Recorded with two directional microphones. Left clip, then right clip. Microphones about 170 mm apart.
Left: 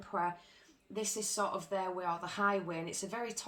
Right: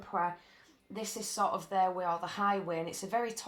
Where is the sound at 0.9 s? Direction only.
35° right (ahead or behind).